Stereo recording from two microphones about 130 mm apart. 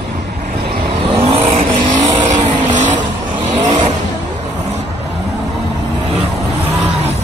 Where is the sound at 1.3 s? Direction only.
50° right (ahead or behind).